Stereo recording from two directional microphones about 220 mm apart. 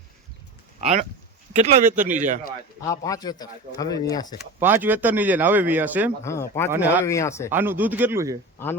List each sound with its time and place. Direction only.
0.8 s speech: 30° right (ahead or behind)
1.9 s speech: 10° right (ahead or behind)
2.1 s speech: 35° right (ahead or behind)
2.8 s speech: 15° left (ahead or behind)
4.6 s speech: 10° right (ahead or behind)
6.2 s speech: 15° left (ahead or behind)
6.7 s speech: 10° right (ahead or behind)
7.0 s speech: 15° left (ahead or behind)
7.5 s speech: 10° right (ahead or behind)